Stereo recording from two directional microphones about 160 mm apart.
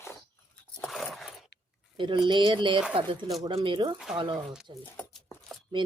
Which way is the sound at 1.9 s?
30° right (ahead or behind).